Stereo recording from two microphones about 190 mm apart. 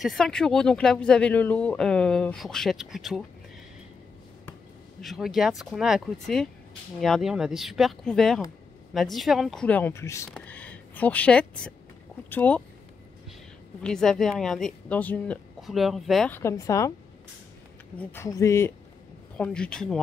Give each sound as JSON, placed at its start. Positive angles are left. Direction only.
{"t": 0.0, "sound": "speech", "side_deg": 0}
{"t": 5.0, "sound": "speech", "side_deg": 0}
{"t": 13.8, "sound": "speech", "side_deg": 0}
{"t": 16.3, "sound": "speech", "side_deg": 15}
{"t": 17.9, "sound": "speech", "side_deg": 15}